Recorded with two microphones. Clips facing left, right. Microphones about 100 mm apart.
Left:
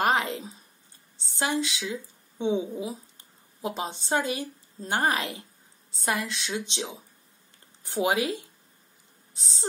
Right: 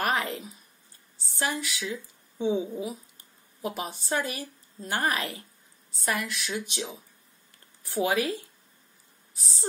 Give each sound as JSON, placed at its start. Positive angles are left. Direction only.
{"t": 0.0, "sound": "a woman's voice", "side_deg": 25}
{"t": 2.4, "sound": "speech", "side_deg": 15}
{"t": 2.8, "sound": "a woman's voice", "side_deg": 25}